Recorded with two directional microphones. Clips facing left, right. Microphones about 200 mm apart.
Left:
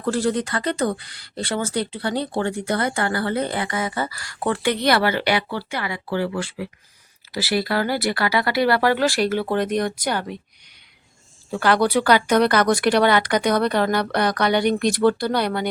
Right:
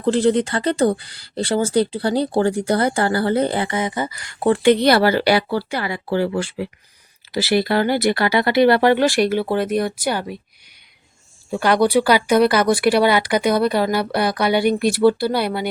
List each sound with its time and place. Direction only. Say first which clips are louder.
0.0 s speech: right 5 dB; 25° right (ahead or behind)
11.5 s speech: right 3 dB; 15° right (ahead or behind)